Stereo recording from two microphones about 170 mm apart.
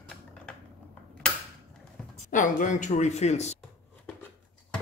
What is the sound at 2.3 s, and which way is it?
A man's voice, 50° left (ahead or behind).